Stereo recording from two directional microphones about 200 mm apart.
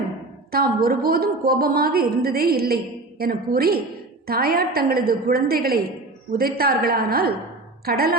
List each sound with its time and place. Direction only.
0.5 s a woman's voice: 50° right (ahead or behind)